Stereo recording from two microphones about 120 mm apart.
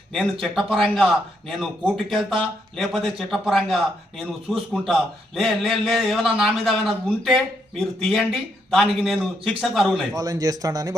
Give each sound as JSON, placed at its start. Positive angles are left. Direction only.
{"t": 0.1, "sound": "a man's voice", "side_deg": 0}
{"t": 10.2, "sound": "speech", "side_deg": -30}